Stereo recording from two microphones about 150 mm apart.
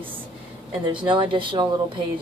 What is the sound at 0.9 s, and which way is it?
Speech, 35° right (ahead or behind).